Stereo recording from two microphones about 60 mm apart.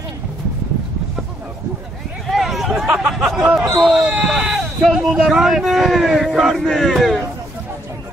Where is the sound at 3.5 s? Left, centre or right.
Centre.